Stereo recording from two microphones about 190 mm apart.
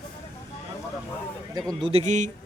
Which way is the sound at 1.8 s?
35° right (ahead or behind).